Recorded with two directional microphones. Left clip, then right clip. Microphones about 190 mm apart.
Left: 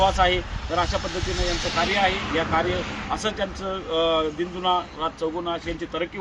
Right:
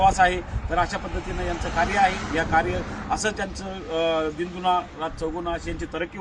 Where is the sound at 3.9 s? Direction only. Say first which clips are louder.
Left 1 dB; 20° right (ahead or behind).